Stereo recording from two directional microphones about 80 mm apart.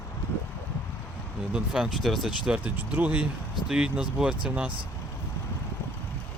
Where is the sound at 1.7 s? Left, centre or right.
Centre.